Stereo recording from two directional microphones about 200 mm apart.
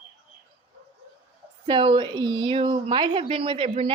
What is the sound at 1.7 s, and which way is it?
A woman's voice, 25° right (ahead or behind).